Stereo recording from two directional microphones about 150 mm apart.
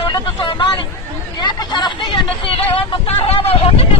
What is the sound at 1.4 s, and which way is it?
Hubbub, 30° left (ahead or behind).